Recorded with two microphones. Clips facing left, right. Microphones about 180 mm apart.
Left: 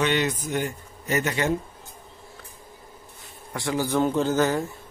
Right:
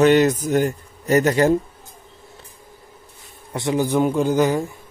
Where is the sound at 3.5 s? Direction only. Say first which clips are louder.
Right 5 dB; 20° right (ahead or behind).